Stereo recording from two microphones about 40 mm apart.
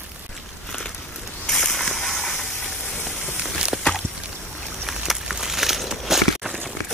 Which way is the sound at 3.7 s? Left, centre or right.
Centre.